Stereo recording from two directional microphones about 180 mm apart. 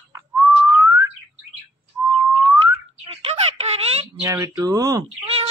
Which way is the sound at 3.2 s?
35° right (ahead or behind).